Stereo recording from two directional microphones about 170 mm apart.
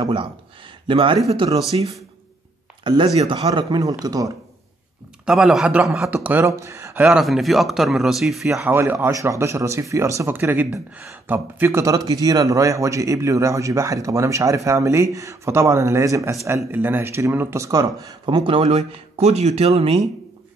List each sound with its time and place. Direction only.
0.0 s speech: 30° right (ahead or behind)
2.8 s speech: 30° right (ahead or behind)
5.2 s speech: 5° right (ahead or behind)
7.1 s speech: centre (ahead or behind); by 20.0 s 35° right (ahead or behind)